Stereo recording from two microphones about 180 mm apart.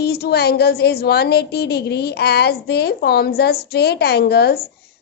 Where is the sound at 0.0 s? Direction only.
60° left (ahead or behind).